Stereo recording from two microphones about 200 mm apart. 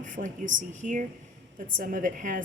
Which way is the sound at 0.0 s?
40° right (ahead or behind).